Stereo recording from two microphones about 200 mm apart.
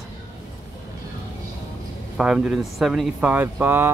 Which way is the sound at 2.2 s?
5° right (ahead or behind).